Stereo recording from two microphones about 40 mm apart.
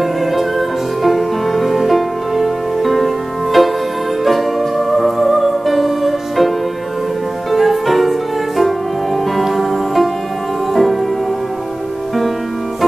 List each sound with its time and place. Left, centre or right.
0.0 s music: centre
7.5 s music: centre